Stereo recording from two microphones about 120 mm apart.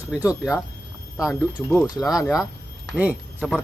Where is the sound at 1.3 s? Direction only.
15° left (ahead or behind).